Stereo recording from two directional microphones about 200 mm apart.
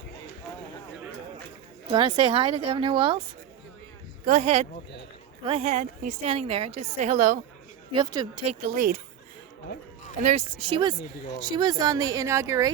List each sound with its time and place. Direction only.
1.9 s speech: 25° right (ahead or behind)
4.3 s a woman's voice: 35° right (ahead or behind)
7.9 s speech: 20° right (ahead or behind)
8.4 s a woman's voice: 40° right (ahead or behind)
10.2 s a woman's voice: 30° right (ahead or behind)